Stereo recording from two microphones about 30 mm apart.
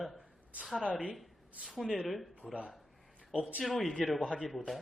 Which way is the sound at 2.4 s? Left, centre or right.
Left.